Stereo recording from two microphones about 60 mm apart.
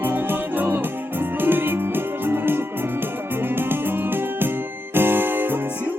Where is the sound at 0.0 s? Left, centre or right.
Right.